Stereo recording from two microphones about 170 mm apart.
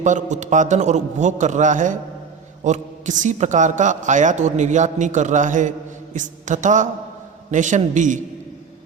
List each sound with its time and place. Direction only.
0.0 s a man's voice: 45° right (ahead or behind)